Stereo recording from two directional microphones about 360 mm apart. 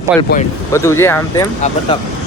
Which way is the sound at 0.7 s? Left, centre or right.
Centre.